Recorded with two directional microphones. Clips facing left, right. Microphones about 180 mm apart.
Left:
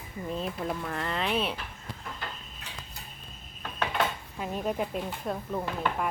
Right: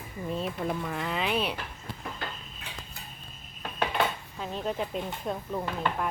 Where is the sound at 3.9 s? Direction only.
5° left (ahead or behind).